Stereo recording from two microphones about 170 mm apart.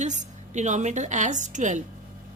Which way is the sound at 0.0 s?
45° right (ahead or behind).